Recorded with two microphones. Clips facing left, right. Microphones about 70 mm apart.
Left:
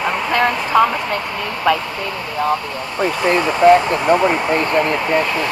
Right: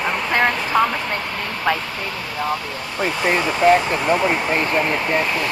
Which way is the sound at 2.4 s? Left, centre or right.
Centre.